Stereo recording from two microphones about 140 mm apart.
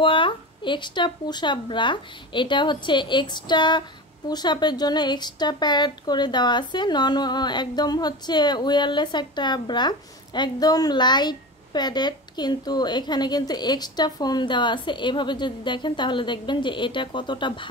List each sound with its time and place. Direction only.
0.0 s a woman's voice: 35° left (ahead or behind)